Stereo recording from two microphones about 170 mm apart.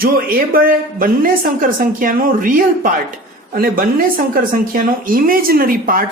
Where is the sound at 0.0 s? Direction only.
60° right (ahead or behind).